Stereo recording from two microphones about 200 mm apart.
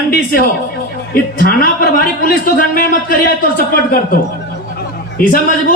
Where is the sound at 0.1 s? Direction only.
45° left (ahead or behind).